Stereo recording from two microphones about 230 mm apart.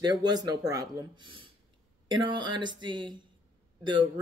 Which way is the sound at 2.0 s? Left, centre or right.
Right.